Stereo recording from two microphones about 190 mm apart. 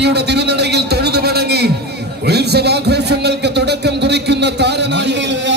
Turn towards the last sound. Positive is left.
turn(degrees=-65)  # may be behind; listen again after turning